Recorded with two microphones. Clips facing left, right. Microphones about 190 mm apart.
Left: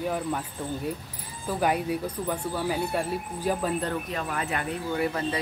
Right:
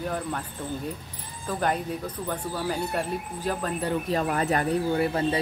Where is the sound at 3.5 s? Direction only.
10° left (ahead or behind).